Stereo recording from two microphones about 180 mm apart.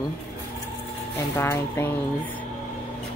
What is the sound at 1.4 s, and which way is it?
Speech, 15° left (ahead or behind).